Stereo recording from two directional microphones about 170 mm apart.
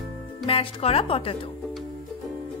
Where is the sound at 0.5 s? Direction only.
30° left (ahead or behind).